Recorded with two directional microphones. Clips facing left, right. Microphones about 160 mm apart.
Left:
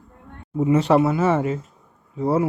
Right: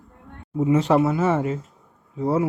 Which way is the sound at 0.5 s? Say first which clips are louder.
Left 1 dB; 60° left (ahead or behind).